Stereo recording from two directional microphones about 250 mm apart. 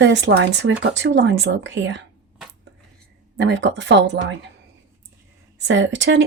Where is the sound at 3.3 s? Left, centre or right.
Right.